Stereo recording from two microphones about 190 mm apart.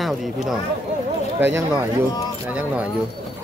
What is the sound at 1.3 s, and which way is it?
Speech, 15° right (ahead or behind).